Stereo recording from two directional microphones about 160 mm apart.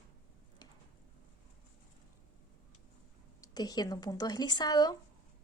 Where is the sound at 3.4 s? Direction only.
25° left (ahead or behind).